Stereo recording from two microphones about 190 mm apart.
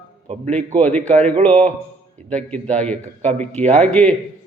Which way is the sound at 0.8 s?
10° left (ahead or behind).